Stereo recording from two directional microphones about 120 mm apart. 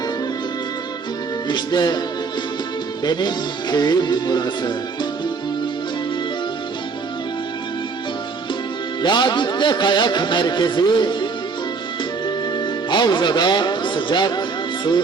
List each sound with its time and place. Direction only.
1.5 s speech: 35° left (ahead or behind)
3.0 s speech: 35° left (ahead or behind)
9.0 s speech: 40° left (ahead or behind)
12.5 s speech: 40° left (ahead or behind)